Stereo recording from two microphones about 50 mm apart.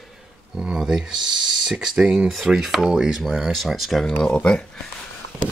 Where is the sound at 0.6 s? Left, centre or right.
Centre.